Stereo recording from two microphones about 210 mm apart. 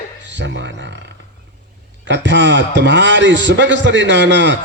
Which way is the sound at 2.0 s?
60° right (ahead or behind).